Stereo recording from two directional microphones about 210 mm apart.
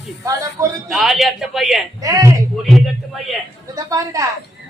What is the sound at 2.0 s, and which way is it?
Speech, 15° right (ahead or behind).